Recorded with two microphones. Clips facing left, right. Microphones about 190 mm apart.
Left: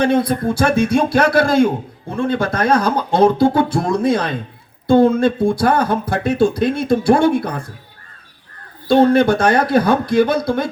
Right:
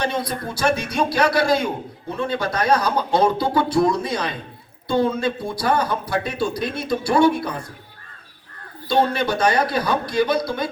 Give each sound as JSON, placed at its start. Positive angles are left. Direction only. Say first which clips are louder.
{"t": 0.0, "sound": "speech", "louder": "left 9 dB", "side_deg": 55}
{"t": 8.9, "sound": "speech", "louder": "left 8 dB", "side_deg": 50}